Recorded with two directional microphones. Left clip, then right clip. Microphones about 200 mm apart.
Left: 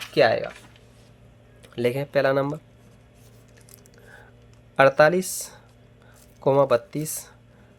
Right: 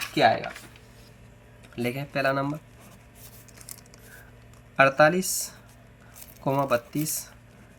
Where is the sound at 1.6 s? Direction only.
50° left (ahead or behind).